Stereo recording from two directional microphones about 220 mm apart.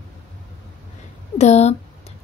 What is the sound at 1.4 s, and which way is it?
Speech, 30° left (ahead or behind).